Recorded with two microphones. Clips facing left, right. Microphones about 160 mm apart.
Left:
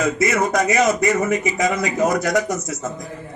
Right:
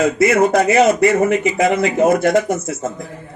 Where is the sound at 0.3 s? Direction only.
30° right (ahead or behind).